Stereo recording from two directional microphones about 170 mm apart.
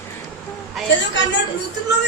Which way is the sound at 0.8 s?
Centre (ahead or behind).